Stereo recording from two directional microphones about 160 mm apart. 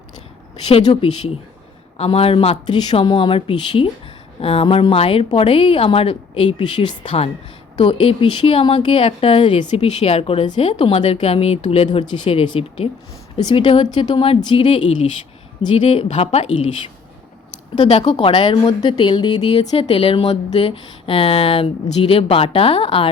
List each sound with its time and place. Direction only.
0.7 s a woman's voice: 45° left (ahead or behind)
9.6 s a woman's voice: 45° left (ahead or behind)